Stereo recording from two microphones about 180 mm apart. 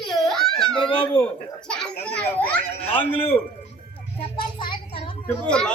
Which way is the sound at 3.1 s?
30° left (ahead or behind).